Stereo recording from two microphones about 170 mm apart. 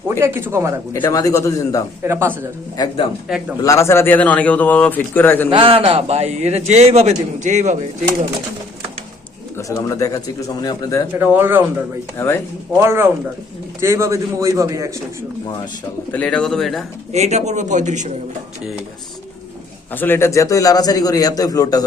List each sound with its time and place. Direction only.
0.1 s a man's voice: 15° right (ahead or behind)
0.9 s a man's voice: 15° left (ahead or behind)
2.0 s a man's voice: 15° right (ahead or behind)
2.7 s a man's voice: 25° left (ahead or behind)
5.5 s a man's voice: 30° right (ahead or behind)
9.6 s a man's voice: 20° left (ahead or behind)
11.1 s a man's voice: 10° right (ahead or behind)
12.1 s a man's voice: 15° left (ahead or behind)
12.8 s a man's voice: 15° right (ahead or behind)
16.1 s speech: 5° left (ahead or behind)
17.1 s a man's voice: 40° right (ahead or behind)
19.9 s a man's voice: 10° left (ahead or behind)